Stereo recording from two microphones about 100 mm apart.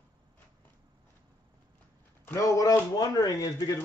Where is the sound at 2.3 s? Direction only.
35° left (ahead or behind).